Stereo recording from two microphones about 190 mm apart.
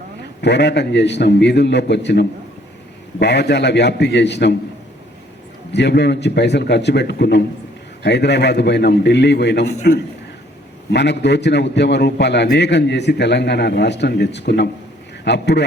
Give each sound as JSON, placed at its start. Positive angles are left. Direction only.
{"t": 0.4, "sound": "a man's voice", "side_deg": 65}
{"t": 5.7, "sound": "a man's voice", "side_deg": 65}